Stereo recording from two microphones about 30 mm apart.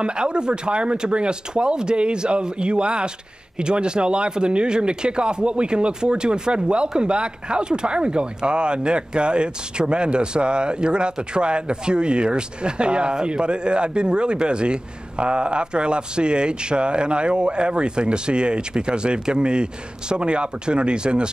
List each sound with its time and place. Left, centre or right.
0.0 s speech: right